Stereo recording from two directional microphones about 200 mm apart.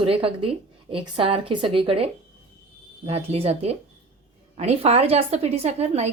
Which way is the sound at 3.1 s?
30° right (ahead or behind).